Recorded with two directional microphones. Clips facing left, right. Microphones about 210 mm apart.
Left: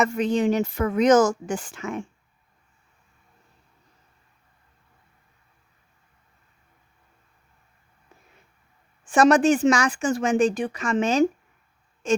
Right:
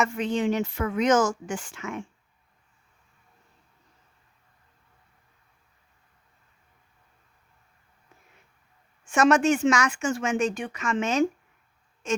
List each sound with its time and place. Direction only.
0.0 s speech: 40° left (ahead or behind)
9.0 s speech: 35° left (ahead or behind)